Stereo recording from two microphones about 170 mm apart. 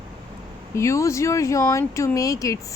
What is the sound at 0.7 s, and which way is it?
Speech, 15° left (ahead or behind).